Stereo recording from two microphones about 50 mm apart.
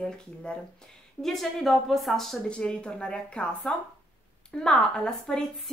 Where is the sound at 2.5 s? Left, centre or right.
Left.